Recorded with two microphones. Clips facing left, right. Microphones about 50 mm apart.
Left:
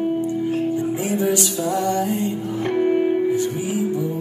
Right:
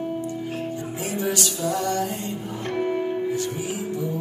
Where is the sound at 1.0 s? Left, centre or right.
Left.